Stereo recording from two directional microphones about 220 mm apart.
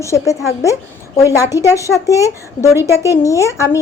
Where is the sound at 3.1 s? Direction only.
15° left (ahead or behind).